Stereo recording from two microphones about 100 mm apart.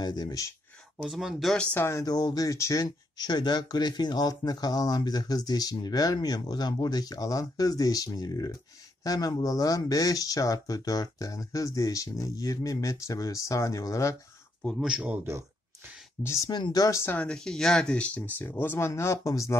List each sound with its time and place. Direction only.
0.0 s speech: 40° left (ahead or behind)
1.0 s speech: centre (ahead or behind)
1.6 s speech: 20° left (ahead or behind)
2.0 s speech: 40° left (ahead or behind)
14.8 s a man's voice: 10° right (ahead or behind)
16.2 s speech: 30° left (ahead or behind)
16.4 s speech: 45° left (ahead or behind); by 17.2 s 25° left (ahead or behind)
17.2 s speech: 10° left (ahead or behind); by 19.6 s 30° left (ahead or behind)